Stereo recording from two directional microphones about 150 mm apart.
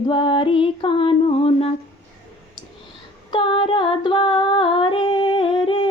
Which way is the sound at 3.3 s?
40° left (ahead or behind).